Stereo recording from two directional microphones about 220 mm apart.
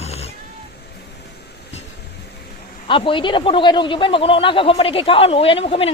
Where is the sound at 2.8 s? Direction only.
20° left (ahead or behind).